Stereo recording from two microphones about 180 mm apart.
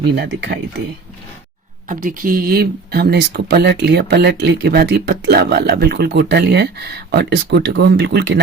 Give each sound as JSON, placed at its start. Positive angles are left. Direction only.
{"t": 0.2, "sound": "speech", "side_deg": -65}
{"t": 1.9, "sound": "speech", "side_deg": -50}